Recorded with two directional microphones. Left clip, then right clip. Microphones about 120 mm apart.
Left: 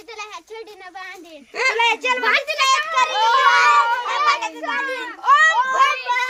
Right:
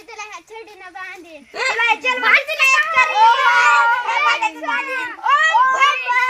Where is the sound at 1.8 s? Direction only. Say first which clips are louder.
Right 4 dB; 30° left (ahead or behind).